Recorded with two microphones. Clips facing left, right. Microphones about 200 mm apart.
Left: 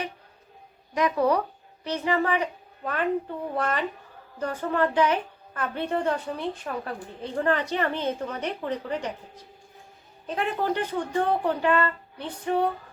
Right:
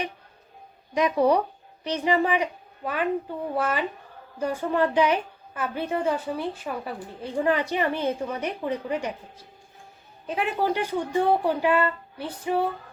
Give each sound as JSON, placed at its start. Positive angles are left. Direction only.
{"t": 0.9, "sound": "a woman's voice", "side_deg": -20}